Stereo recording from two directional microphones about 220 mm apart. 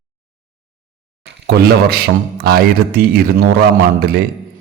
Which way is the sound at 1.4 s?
45° right (ahead or behind).